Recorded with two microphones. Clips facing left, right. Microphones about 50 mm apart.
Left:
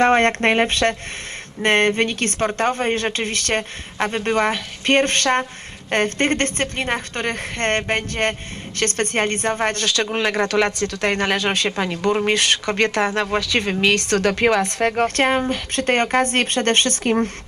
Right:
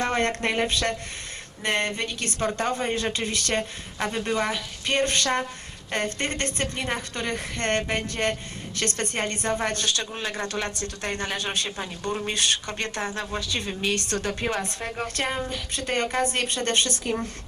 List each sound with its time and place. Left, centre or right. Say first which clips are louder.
0.0 s a woman's voice: left 9 dB; left
9.8 s speech: left 8 dB; left